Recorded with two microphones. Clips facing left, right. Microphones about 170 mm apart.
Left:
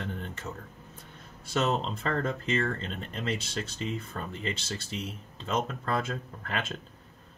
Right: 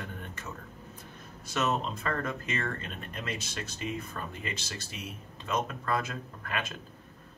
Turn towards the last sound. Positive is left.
turn(degrees=25)  # may be behind; listen again after turning